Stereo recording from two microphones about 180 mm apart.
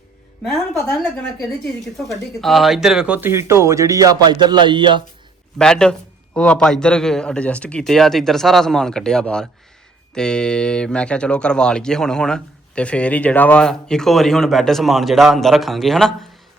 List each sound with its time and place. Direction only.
2.0 s speech: centre (ahead or behind); by 5.0 s 25° right (ahead or behind)
5.5 s speech: 5° left (ahead or behind)